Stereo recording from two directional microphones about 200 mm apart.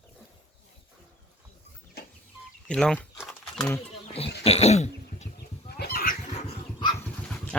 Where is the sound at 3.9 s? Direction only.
30° left (ahead or behind).